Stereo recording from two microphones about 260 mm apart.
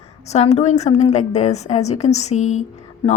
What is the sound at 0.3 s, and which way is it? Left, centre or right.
A woman's voice, left.